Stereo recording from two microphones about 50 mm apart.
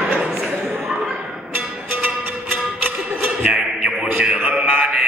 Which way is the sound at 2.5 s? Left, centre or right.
Right.